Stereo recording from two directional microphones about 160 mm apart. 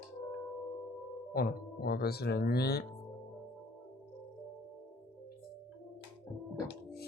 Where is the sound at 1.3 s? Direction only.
80° left.